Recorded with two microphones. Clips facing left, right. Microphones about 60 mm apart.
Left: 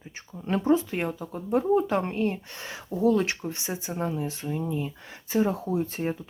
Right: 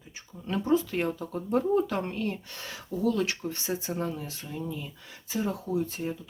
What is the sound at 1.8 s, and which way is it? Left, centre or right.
Speech, left.